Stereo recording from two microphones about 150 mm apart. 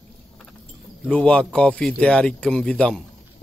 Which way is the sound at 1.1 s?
10° left (ahead or behind).